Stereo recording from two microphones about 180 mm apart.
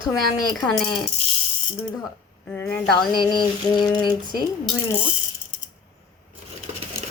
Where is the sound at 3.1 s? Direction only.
25° left (ahead or behind).